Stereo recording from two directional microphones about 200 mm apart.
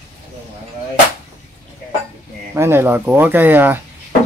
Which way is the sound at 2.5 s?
10° right (ahead or behind).